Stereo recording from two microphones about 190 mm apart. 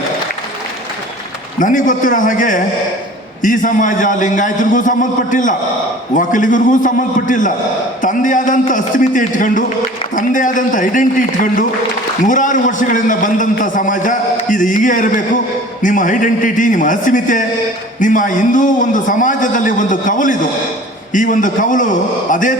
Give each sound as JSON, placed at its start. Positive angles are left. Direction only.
{"t": 1.5, "sound": "a man's voice", "side_deg": 45}